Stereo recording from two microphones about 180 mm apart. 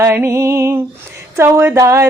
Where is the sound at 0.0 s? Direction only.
15° right (ahead or behind).